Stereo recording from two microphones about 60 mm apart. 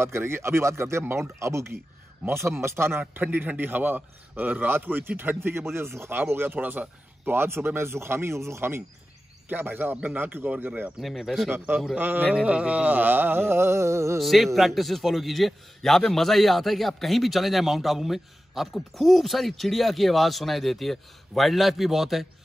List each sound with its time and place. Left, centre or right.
0.0 s a man's voice: right
9.5 s a man's voice: right
11.0 s a man's voice: centre
11.5 s a man's voice: right
12.4 s a man's voice: right
14.2 s a man's voice: centre